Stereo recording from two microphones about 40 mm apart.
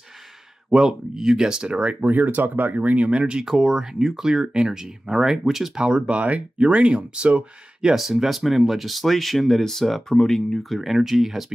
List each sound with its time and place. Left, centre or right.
0.7 s speech: centre
2.0 s speech: right
3.4 s speech: centre
5.8 s speech: right
7.9 s speech: centre